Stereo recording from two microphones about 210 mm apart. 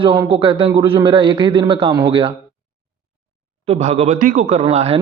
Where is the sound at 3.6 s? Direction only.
30° right (ahead or behind).